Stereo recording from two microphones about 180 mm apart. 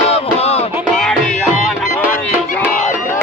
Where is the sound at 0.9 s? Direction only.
5° left (ahead or behind).